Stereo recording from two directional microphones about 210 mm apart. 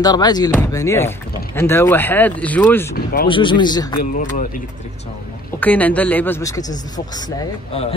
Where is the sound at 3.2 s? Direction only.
25° left (ahead or behind).